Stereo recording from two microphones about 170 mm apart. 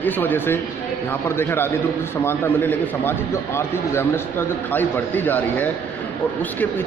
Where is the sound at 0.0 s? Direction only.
10° left (ahead or behind).